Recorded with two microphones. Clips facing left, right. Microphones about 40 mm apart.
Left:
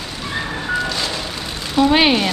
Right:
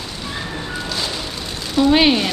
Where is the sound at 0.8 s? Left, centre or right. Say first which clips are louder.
Left 3 dB; centre.